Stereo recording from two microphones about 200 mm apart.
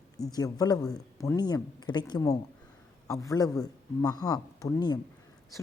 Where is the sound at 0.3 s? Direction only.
20° left (ahead or behind).